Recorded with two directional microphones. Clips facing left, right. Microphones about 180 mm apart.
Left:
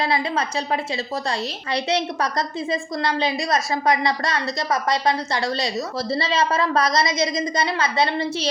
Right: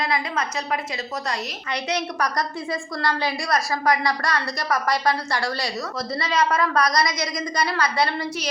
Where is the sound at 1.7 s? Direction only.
25° left (ahead or behind).